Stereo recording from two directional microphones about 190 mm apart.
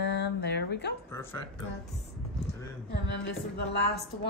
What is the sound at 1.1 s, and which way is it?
Speech, 10° left (ahead or behind).